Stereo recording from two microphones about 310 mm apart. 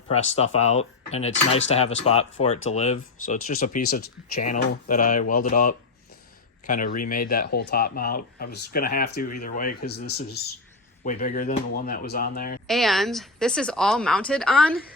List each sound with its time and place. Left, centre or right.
0.1 s speech: centre
12.6 s speech: centre